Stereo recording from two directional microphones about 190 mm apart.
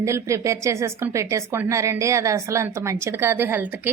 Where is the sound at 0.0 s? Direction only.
15° right (ahead or behind).